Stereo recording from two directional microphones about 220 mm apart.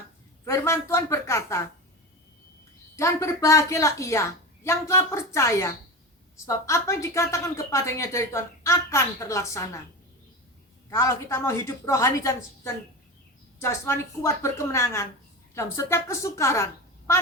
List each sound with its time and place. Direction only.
0.4 s a woman's voice: 10° left (ahead or behind)
2.9 s a woman's voice: 15° left (ahead or behind)
10.8 s a woman's voice: 15° left (ahead or behind)